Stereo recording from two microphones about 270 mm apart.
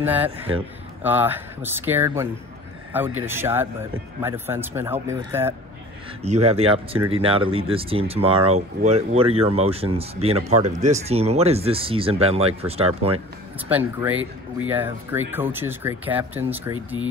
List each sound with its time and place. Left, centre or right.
0.0 s speech: centre
6.2 s speech: right
13.7 s speech: centre